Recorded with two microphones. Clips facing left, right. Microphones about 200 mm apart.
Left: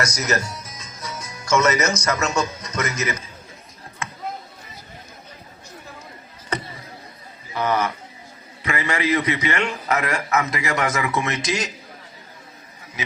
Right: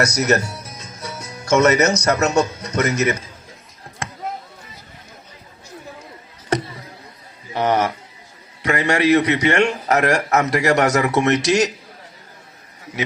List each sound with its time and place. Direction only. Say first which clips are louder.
0.0 s music: right 6 dB; 60° right (ahead or behind)
2.2 s speech: right 6 dB; 65° right (ahead or behind)
7.5 s a man's voice: right 4 dB; 80° right